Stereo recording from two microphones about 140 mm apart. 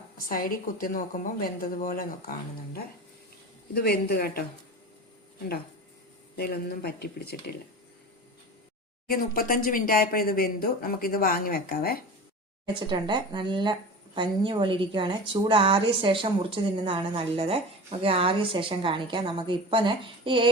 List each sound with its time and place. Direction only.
0.2 s speech: 90° left
3.8 s speech: 90° left
6.3 s speech: 90° left
9.0 s speech: 90° left
12.6 s a woman's voice: 35° right (ahead or behind)